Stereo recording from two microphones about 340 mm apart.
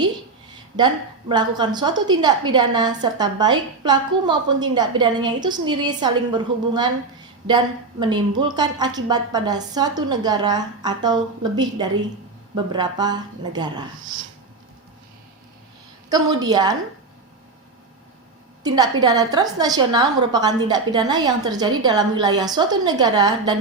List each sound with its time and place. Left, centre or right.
1.3 s a woman's voice: centre
16.0 s a woman's voice: centre
18.6 s a woman's voice: centre